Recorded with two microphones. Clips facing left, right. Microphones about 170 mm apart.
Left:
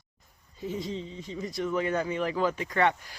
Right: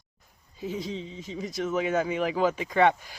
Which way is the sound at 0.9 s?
20° right (ahead or behind).